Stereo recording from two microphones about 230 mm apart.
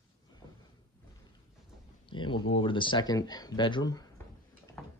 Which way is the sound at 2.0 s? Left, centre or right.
Left.